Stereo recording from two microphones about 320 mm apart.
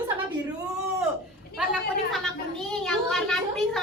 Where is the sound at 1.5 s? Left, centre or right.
Centre.